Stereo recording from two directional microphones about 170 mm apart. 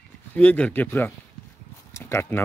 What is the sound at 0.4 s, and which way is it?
Speech, 10° left (ahead or behind).